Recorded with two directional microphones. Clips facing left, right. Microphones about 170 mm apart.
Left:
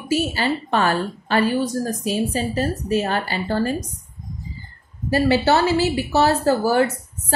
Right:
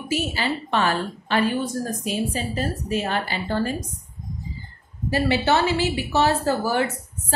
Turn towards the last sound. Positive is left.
turn(degrees=40)  # may be behind; listen again after turning